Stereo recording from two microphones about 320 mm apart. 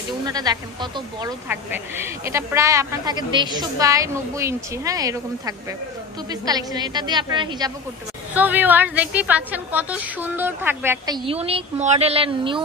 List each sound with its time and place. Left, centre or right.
0.2 s a woman's voice: centre